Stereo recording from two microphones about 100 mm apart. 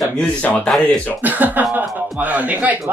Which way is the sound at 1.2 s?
15° right (ahead or behind).